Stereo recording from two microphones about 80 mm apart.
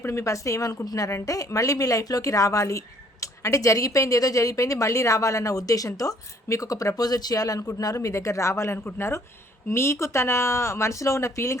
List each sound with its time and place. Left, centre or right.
0.0 s speech: left